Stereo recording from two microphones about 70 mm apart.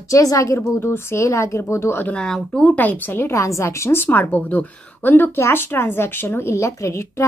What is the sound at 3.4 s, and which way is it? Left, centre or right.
Speech, left.